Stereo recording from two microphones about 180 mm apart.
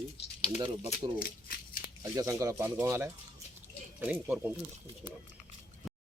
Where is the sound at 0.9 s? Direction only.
55° left (ahead or behind).